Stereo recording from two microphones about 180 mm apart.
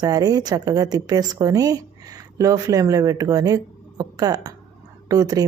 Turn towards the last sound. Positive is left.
turn(degrees=-20)  # may be behind; listen again after turning